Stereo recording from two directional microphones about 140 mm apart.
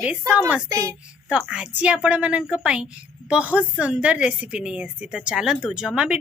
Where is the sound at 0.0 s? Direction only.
5° right (ahead or behind).